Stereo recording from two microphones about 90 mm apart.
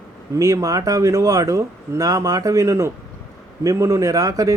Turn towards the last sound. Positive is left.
turn(degrees=-40)  # may be behind; listen again after turning